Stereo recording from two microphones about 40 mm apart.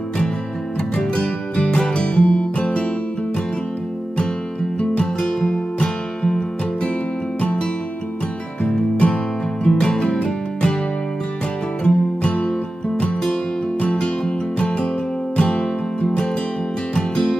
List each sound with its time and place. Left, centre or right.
0.9 s music: left
5.8 s music: centre
8.6 s music: left
11.8 s music: left
13.7 s music: left